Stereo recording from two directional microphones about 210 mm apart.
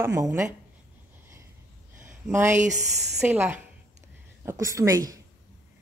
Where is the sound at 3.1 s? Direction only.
10° right (ahead or behind).